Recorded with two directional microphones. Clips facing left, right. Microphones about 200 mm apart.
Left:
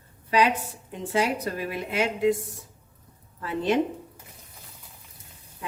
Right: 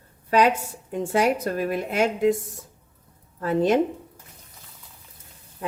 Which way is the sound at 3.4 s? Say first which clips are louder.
Right 5 dB; 45° right (ahead or behind).